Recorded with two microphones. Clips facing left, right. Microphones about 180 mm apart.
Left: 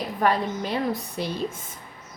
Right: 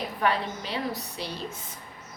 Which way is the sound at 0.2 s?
45° left (ahead or behind).